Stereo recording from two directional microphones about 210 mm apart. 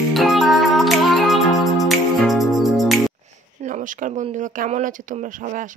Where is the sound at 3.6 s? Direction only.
40° right (ahead or behind).